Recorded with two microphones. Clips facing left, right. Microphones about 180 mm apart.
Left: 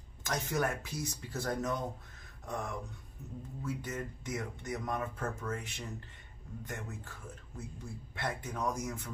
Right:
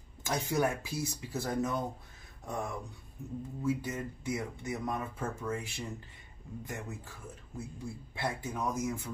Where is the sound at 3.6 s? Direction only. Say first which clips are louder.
Right 5 dB; 10° right (ahead or behind).